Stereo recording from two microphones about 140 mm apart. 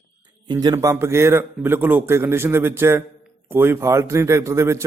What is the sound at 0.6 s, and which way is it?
A man's voice, 25° right (ahead or behind).